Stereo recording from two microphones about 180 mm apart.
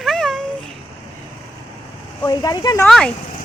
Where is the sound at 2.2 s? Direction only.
20° left (ahead or behind).